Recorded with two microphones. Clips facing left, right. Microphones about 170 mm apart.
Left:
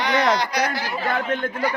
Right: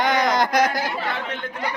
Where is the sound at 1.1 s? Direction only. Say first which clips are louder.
Left 5 dB; 50° left (ahead or behind).